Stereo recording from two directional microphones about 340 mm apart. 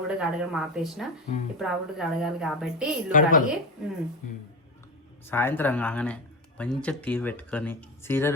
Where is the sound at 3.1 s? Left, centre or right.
Left.